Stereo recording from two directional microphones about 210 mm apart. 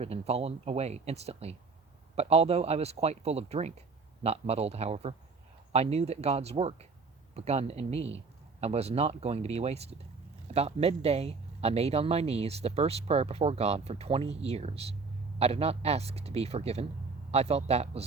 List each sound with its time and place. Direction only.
0.0 s speech: 30° right (ahead or behind)